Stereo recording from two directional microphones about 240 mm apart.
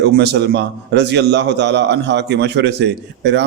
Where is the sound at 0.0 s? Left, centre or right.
Right.